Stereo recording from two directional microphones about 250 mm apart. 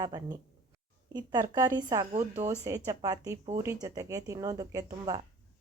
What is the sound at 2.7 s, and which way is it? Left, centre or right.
Speech, centre.